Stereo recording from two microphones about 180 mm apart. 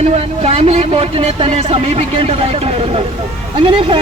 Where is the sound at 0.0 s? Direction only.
35° right (ahead or behind).